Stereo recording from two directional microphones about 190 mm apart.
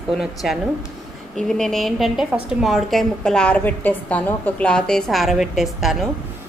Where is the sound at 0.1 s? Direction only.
Centre (ahead or behind).